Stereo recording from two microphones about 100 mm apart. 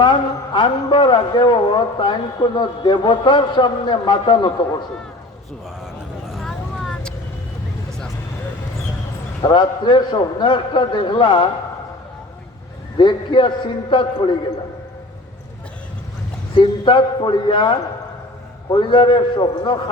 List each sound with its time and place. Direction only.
0.0 s a man's voice: 50° left (ahead or behind)
6.3 s vehicle: 5° left (ahead or behind)
9.4 s a man's voice: 45° left (ahead or behind)
13.0 s a man's voice: 55° left (ahead or behind)
16.6 s a man's voice: 55° left (ahead or behind)